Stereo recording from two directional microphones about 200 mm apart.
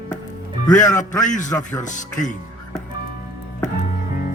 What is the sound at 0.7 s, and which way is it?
Speech, 40° left (ahead or behind).